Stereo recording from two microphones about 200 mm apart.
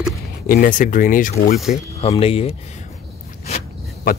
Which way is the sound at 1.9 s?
30° left (ahead or behind).